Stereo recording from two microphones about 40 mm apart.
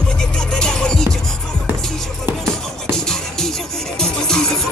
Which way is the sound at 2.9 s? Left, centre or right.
Centre.